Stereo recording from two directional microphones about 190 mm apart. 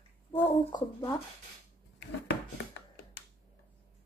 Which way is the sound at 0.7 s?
15° left (ahead or behind).